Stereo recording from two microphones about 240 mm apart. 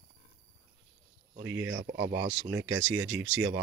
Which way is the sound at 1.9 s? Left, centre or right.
Right.